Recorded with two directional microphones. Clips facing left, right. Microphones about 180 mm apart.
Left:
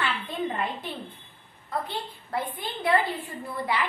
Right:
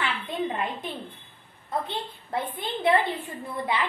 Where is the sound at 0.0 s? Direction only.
20° right (ahead or behind).